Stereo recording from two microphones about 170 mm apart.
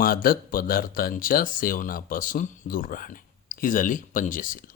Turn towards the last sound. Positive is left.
turn(degrees=50)  # may be behind; listen again after turning